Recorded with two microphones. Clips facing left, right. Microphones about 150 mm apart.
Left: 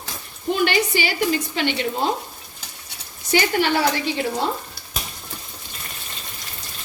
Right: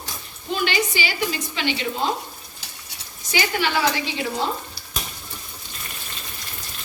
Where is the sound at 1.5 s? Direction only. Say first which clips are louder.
Left 3 dB; 55° left (ahead or behind).